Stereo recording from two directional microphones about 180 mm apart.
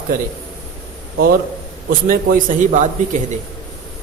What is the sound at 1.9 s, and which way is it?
A man's voice, 50° right (ahead or behind).